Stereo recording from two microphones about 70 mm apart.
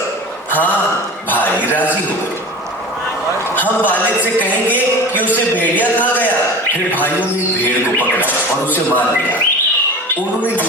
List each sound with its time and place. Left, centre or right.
0.5 s a man's voice: left
3.5 s speech: left
5.5 s speech: left
7.6 s speech: left